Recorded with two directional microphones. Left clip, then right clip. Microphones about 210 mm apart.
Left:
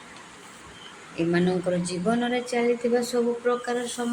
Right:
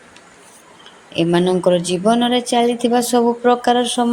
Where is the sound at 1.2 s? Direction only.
35° right (ahead or behind).